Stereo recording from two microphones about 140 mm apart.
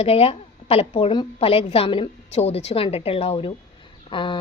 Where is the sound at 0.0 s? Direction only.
45° left (ahead or behind).